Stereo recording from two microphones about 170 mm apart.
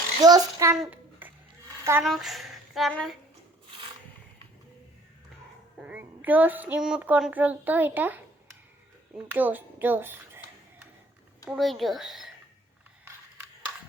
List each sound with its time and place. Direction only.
0.2 s a child's voice: 25° right (ahead or behind)
0.8 s babbling: 10° right (ahead or behind)
1.8 s speech: 15° right (ahead or behind)
2.0 s speech: centre (ahead or behind)
5.7 s a child's voice: 5° right (ahead or behind)
11.4 s speech: centre (ahead or behind)